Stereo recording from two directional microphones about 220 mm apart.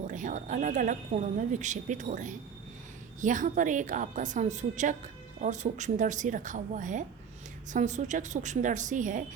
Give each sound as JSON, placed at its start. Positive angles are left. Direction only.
{"t": 0.1, "sound": "a woman's voice", "side_deg": -35}